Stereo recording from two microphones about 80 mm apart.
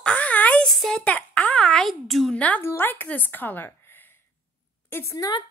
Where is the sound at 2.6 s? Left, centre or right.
Left.